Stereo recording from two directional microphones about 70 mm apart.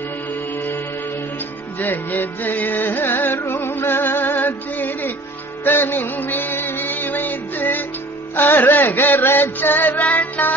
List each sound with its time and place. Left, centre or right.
1.8 s music: left